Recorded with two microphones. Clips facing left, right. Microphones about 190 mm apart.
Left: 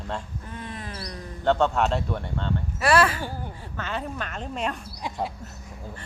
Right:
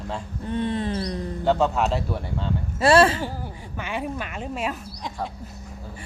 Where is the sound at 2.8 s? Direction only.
25° right (ahead or behind).